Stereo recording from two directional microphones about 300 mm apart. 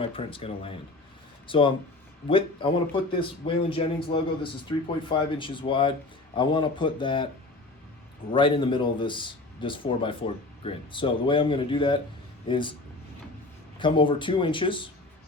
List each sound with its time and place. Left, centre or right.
0.0 s speech: centre
8.3 s speech: centre
13.7 s speech: centre